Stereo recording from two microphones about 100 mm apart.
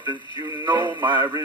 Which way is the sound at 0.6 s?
50° right (ahead or behind).